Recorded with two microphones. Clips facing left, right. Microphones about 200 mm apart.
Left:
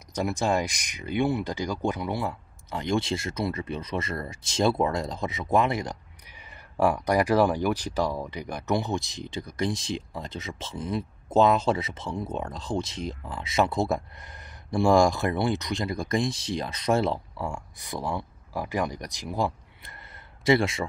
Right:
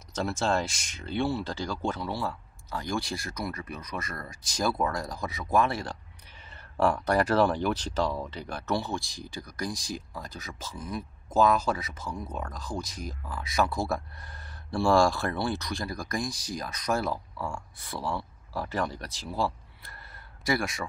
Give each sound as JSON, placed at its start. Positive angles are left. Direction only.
{"t": 0.1, "sound": "speech", "side_deg": 15}